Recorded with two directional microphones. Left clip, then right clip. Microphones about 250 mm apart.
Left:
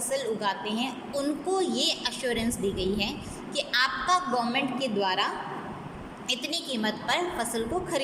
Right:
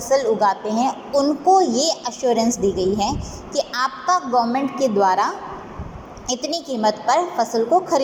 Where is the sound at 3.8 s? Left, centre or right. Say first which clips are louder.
Right 3 dB; centre.